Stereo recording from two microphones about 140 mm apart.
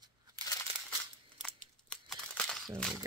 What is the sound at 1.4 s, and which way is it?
Crumpling, 5° left (ahead or behind).